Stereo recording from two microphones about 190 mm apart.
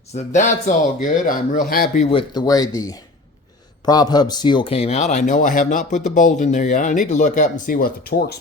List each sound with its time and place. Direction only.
0.1 s a man's voice: 35° left (ahead or behind)
2.0 s a man's voice: 25° left (ahead or behind); by 8.4 s 55° left (ahead or behind)